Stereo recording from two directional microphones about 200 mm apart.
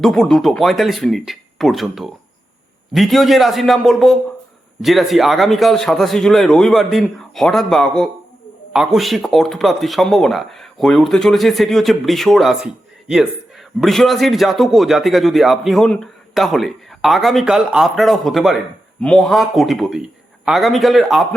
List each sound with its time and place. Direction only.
0.0 s a man's voice: centre (ahead or behind)
13.8 s a man's voice: centre (ahead or behind)